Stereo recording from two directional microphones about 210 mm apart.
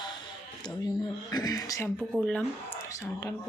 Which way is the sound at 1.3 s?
20° left (ahead or behind).